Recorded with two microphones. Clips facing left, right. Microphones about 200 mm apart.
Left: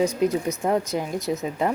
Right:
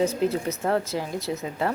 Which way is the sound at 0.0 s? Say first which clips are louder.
Left 2 dB; 15° left (ahead or behind).